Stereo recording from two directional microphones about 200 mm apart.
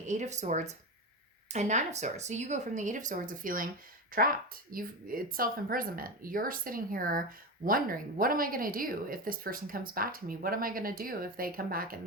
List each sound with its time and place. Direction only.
0.0 s speech: 35° right (ahead or behind)